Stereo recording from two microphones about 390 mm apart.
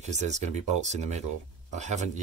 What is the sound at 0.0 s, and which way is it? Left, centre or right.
Speech, centre.